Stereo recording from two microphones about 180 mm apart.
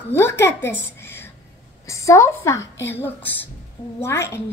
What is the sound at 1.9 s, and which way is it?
A woman's voice, 15° left (ahead or behind).